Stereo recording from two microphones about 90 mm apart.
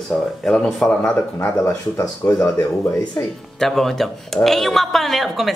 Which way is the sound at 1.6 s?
30° left (ahead or behind).